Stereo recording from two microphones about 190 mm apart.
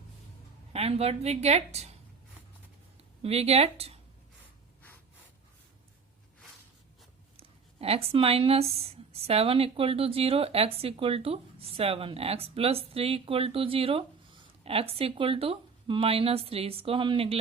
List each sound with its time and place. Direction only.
0.7 s speech: 30° right (ahead or behind)
3.2 s speech: 35° right (ahead or behind)
7.3 s speech: 30° right (ahead or behind)